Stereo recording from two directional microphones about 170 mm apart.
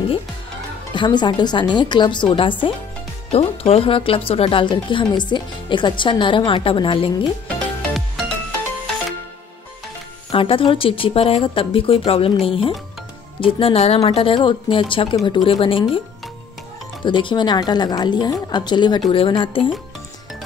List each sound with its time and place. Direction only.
0.9 s speech: 25° left (ahead or behind)
7.4 s music: centre (ahead or behind)
10.3 s a woman's voice: 30° left (ahead or behind)
17.0 s speech: 30° left (ahead or behind)